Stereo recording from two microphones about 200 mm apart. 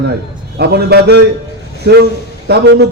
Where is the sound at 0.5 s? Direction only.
55° right (ahead or behind).